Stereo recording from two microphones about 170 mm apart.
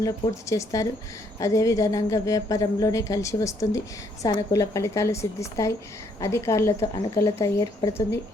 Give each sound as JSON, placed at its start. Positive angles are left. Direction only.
{"t": 0.0, "sound": "a woman's voice", "side_deg": 20}